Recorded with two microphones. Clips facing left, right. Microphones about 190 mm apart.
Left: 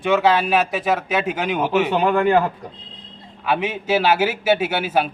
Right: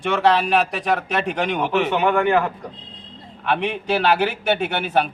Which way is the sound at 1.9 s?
35° left (ahead or behind).